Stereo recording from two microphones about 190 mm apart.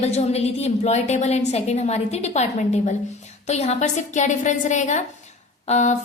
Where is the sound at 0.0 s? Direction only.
35° left (ahead or behind).